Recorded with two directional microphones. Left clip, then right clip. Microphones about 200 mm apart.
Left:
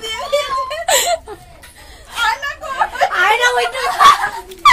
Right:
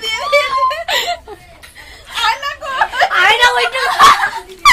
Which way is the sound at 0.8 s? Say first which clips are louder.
Left 2 dB; 50° left (ahead or behind).